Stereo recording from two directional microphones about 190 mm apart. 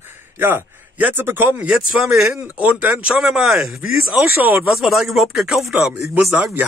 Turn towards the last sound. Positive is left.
turn(degrees=-5)  # may be behind; listen again after turning